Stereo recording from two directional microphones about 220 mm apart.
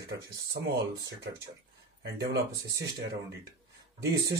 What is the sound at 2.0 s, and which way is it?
Speech, 45° right (ahead or behind).